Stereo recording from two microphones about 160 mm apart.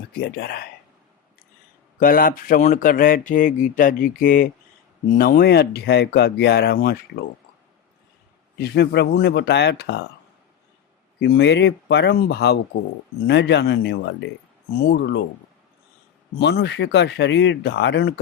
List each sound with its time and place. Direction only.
0.1 s speech: 75° left (ahead or behind)
2.0 s speech: 65° left (ahead or behind)
5.1 s speech: 70° left (ahead or behind)
8.5 s speech: 90° left
11.2 s speech: 90° left
16.4 s speech: 90° left